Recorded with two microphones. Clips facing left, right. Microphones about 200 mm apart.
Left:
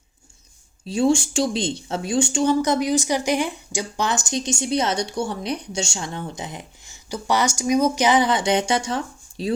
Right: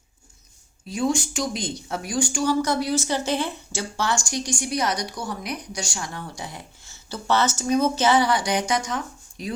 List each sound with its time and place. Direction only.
0.9 s speech: 30° left (ahead or behind)